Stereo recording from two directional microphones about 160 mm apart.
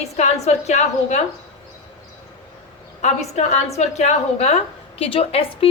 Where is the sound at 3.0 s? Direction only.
45° left (ahead or behind).